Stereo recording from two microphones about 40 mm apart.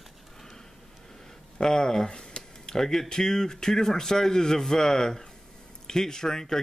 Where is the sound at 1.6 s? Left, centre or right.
Centre.